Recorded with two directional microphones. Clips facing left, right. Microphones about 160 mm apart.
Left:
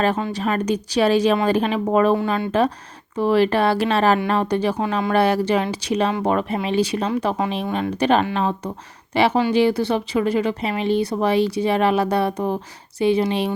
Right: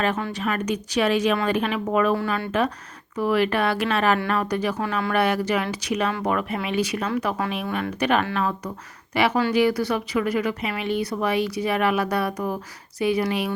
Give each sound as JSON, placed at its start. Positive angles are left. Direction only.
{"t": 0.3, "sound": "speech", "side_deg": 30}